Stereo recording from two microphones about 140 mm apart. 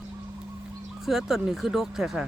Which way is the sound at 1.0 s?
Centre (ahead or behind).